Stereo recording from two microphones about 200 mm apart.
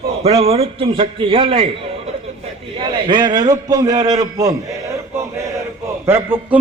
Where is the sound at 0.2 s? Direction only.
30° right (ahead or behind).